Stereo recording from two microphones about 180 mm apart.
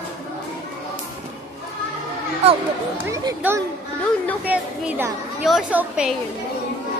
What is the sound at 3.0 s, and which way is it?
A woman's voice, 20° right (ahead or behind).